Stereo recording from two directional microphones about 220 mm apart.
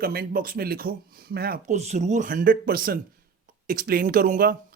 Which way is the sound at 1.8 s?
30° right (ahead or behind).